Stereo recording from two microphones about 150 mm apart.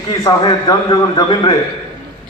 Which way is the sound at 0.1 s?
25° left (ahead or behind).